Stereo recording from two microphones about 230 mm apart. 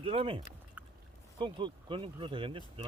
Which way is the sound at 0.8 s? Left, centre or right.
Centre.